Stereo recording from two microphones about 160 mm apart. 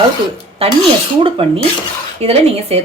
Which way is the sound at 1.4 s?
35° right (ahead or behind).